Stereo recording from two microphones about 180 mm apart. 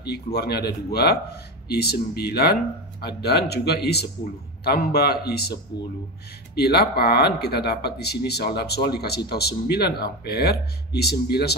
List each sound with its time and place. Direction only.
0.0 s speech: 60° left (ahead or behind)